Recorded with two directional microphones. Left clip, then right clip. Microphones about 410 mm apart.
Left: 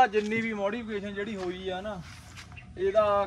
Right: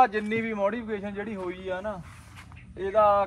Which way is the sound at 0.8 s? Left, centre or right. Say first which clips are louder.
Right 1 dB; centre.